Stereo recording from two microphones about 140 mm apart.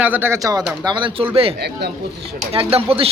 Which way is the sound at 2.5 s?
40° right (ahead or behind).